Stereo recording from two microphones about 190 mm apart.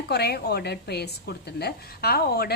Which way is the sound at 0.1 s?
55° left (ahead or behind).